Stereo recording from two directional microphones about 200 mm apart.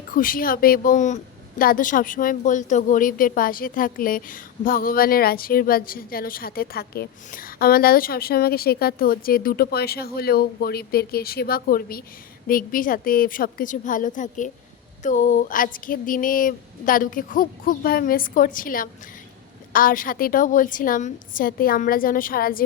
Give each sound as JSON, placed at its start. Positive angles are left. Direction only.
{"t": 0.1, "sound": "a woman's voice", "side_deg": 45}